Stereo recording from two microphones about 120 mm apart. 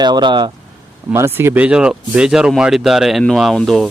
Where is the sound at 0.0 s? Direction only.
40° right (ahead or behind).